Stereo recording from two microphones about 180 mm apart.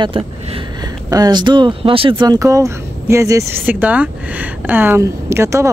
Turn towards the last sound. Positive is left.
turn(degrees=-15)  # may be behind; listen again after turning